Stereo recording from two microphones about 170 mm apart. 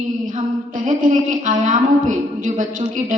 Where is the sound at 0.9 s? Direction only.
50° right (ahead or behind).